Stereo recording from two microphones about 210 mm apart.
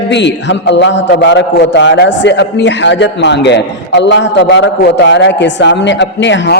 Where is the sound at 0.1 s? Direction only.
55° left (ahead or behind).